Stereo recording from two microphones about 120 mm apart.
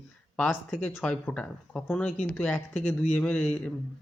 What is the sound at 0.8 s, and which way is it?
Speech, 15° left (ahead or behind).